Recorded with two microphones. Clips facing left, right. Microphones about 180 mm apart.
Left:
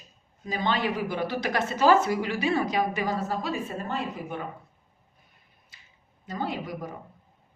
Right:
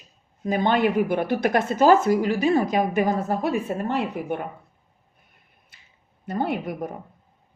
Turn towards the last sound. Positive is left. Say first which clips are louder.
# right 6 dB
turn(degrees=-60)  # may be behind; listen again after turning